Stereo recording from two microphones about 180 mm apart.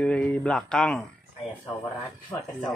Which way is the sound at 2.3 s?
20° left (ahead or behind).